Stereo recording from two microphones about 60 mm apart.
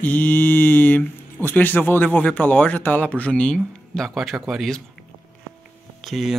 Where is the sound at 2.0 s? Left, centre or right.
Left; by 4.6 s centre.